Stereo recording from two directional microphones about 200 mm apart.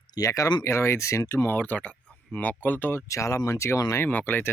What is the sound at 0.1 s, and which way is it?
Speech, 15° left (ahead or behind).